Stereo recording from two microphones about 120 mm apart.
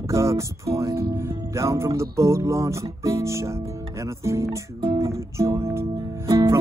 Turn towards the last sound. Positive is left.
turn(degrees=-25)  # may be behind; listen again after turning